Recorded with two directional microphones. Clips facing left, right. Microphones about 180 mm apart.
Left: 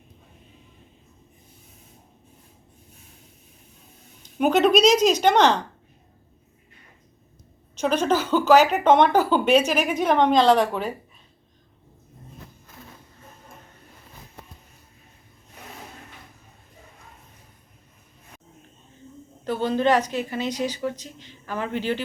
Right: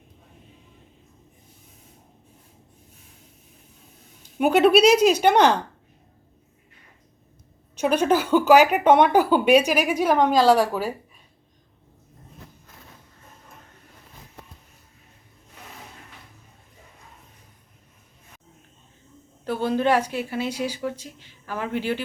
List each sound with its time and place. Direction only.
4.2 s speech: 10° right (ahead or behind)
7.8 s speech: 10° right (ahead or behind)
19.5 s speech: 10° right (ahead or behind)